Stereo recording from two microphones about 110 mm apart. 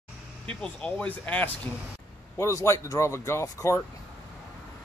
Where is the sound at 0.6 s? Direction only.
10° left (ahead or behind).